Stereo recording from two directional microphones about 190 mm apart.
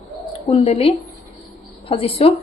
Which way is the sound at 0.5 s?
30° left (ahead or behind).